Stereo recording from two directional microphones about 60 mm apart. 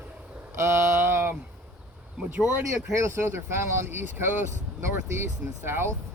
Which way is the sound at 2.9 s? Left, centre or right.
Right.